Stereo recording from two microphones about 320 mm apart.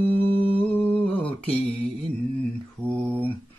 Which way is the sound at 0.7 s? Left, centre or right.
Centre.